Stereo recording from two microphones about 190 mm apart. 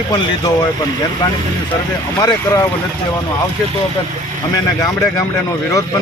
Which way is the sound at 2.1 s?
20° left (ahead or behind).